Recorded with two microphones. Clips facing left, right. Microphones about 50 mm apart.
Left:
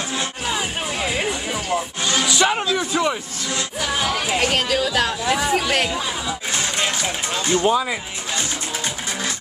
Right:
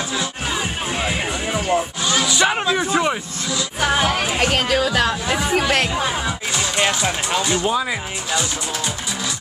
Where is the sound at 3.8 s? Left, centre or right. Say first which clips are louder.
Right 5 dB; right.